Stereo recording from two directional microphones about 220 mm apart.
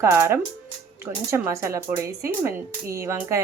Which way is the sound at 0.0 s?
15° right (ahead or behind).